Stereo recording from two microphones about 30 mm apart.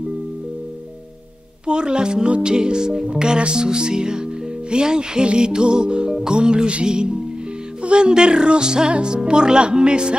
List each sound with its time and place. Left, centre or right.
1.7 s speech: right